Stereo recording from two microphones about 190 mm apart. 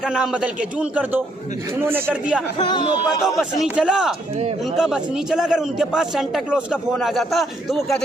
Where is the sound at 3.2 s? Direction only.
5° right (ahead or behind).